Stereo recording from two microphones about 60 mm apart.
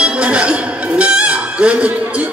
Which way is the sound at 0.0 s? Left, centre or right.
Centre.